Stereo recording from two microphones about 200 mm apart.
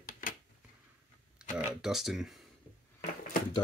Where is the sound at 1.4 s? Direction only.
5° right (ahead or behind).